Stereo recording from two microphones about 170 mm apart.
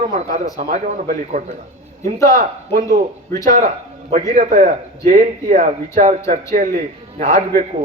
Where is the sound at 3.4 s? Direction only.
50° right (ahead or behind).